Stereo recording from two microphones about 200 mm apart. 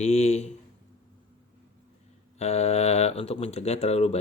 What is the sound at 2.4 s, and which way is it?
Speech, 30° left (ahead or behind).